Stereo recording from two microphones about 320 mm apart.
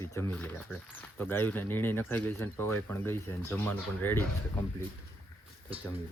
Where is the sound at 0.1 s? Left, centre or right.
Centre.